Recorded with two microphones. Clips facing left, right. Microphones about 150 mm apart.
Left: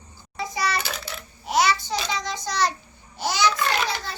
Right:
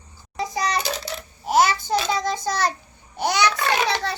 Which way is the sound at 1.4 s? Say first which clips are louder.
Right 3 dB; 50° right (ahead or behind).